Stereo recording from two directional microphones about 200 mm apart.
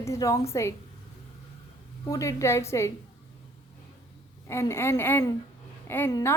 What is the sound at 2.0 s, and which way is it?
Speech, 15° left (ahead or behind).